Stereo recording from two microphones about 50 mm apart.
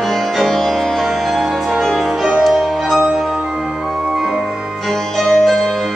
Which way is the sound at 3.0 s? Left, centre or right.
Centre.